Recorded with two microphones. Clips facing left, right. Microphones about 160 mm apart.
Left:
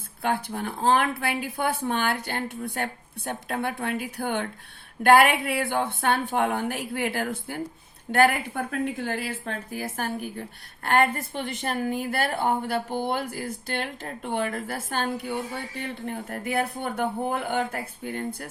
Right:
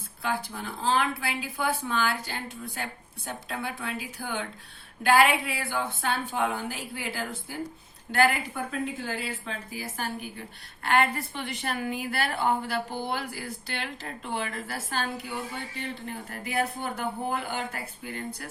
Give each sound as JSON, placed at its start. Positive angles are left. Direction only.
{"t": 0.2, "sound": "a woman's voice", "side_deg": 60}